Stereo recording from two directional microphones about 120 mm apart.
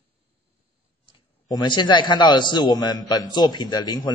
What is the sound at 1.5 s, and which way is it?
A man's voice, 40° left (ahead or behind).